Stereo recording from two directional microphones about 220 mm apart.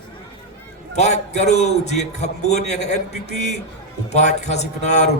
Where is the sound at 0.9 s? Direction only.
30° left (ahead or behind).